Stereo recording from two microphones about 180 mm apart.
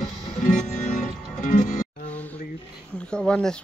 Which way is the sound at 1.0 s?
45° left (ahead or behind).